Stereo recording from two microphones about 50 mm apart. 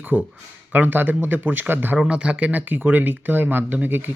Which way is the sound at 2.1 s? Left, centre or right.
Right.